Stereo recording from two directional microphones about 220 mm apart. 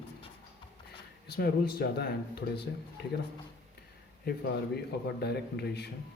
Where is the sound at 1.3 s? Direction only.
45° left (ahead or behind).